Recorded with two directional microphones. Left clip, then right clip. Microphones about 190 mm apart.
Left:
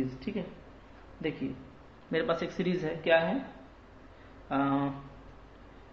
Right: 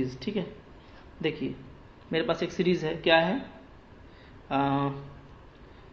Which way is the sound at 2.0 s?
30° right (ahead or behind).